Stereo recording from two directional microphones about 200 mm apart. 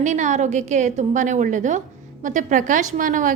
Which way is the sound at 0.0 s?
40° right (ahead or behind).